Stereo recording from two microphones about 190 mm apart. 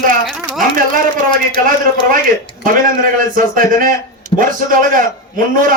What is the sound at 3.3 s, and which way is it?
A man's voice, 45° right (ahead or behind).